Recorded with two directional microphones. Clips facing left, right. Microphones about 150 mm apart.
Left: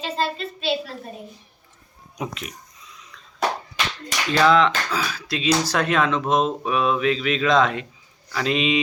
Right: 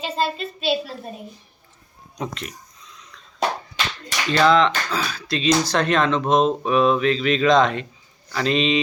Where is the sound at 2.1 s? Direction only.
5° left (ahead or behind).